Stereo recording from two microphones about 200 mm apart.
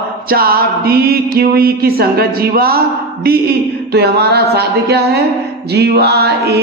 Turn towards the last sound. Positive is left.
turn(degrees=-55)  # may be behind; listen again after turning